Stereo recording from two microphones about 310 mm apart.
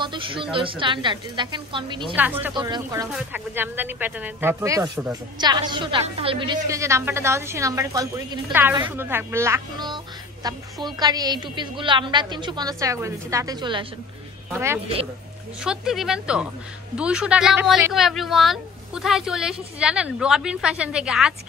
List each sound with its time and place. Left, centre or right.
0.0 s speech: centre
15.6 s speech: centre